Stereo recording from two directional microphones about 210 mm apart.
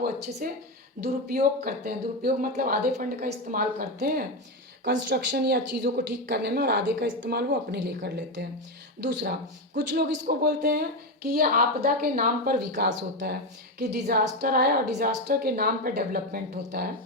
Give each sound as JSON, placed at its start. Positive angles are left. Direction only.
{"t": 0.0, "sound": "speech", "side_deg": -45}
{"t": 4.9, "sound": "speech", "side_deg": -55}
{"t": 9.7, "sound": "speech", "side_deg": -50}